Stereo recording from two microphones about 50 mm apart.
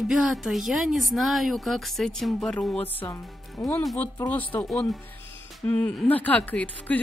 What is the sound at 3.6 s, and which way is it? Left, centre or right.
Speech, left.